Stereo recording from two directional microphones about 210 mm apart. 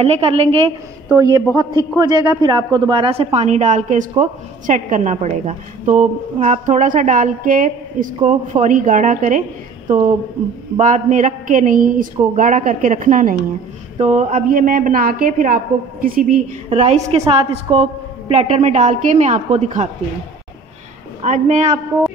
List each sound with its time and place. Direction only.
0.0 s a woman's voice: 30° right (ahead or behind)
21.2 s a woman's voice: 35° right (ahead or behind)